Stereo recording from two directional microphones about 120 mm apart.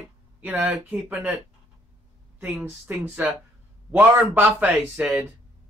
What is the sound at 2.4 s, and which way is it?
Speech, 15° right (ahead or behind).